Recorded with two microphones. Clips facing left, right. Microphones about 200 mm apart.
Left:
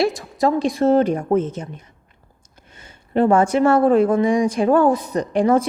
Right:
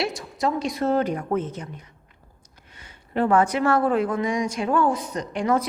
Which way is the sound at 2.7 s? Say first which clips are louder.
Left 6 dB; 25° left (ahead or behind).